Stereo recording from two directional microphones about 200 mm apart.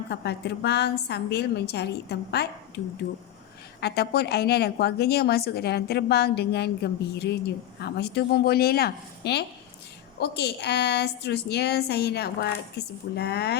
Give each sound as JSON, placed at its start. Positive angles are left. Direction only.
{"t": 0.1, "sound": "a woman's voice", "side_deg": 55}